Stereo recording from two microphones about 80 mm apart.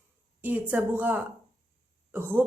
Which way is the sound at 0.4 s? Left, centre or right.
Centre.